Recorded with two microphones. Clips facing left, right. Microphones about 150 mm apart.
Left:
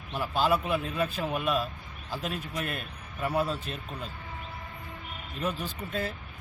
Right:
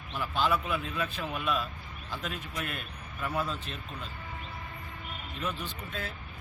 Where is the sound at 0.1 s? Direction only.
40° left (ahead or behind).